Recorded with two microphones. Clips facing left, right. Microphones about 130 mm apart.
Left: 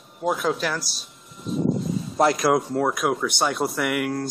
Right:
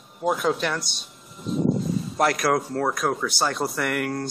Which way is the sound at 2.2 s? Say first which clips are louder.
Left 3 dB; 25° left (ahead or behind).